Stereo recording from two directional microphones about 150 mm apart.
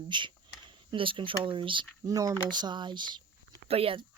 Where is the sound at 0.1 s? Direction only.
30° right (ahead or behind).